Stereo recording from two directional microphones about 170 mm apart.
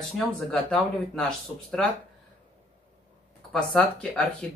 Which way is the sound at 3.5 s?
5° left (ahead or behind).